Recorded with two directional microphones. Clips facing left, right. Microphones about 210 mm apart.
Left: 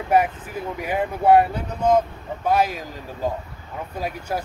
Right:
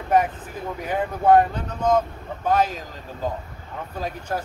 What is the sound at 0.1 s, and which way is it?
Speech, 10° left (ahead or behind).